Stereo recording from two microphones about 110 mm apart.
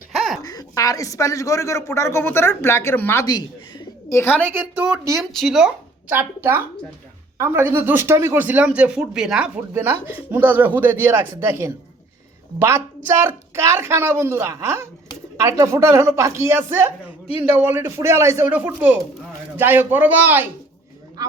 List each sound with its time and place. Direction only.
0.4 s a man's voice: 35° left (ahead or behind)
3.2 s speech: 40° left (ahead or behind)
4.1 s a man's voice: 20° left (ahead or behind)
4.4 s speech: 20° right (ahead or behind)
5.2 s speech: 5° left (ahead or behind)
6.1 s a woman's voice: 20° right (ahead or behind)
9.7 s a woman's voice: 20° right (ahead or behind)